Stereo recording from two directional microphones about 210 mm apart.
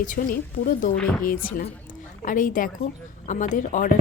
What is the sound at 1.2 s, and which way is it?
A woman's voice, 40° left (ahead or behind).